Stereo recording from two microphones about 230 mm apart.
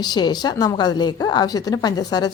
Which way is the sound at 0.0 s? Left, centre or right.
Centre.